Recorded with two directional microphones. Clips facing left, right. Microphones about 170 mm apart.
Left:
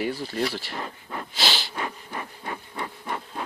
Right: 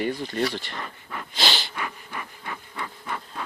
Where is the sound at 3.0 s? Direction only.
20° left (ahead or behind).